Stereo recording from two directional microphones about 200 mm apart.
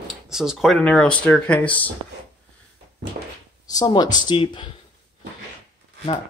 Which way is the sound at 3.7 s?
20° left (ahead or behind).